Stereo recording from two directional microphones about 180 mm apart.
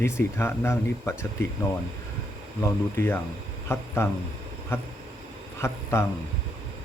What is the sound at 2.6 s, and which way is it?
Speech, 10° left (ahead or behind).